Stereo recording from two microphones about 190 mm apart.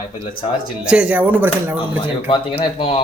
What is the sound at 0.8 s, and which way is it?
Speech, 5° right (ahead or behind).